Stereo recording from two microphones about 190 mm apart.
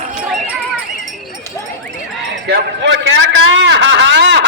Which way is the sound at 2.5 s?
65° right (ahead or behind).